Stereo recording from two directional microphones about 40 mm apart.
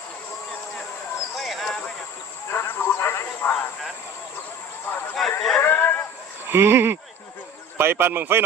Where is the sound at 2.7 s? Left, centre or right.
Left.